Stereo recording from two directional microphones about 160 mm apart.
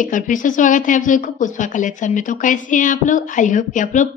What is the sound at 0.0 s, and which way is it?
A woman's voice, 55° left (ahead or behind).